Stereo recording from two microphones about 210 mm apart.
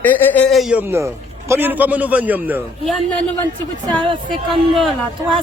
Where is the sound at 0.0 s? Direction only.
10° left (ahead or behind).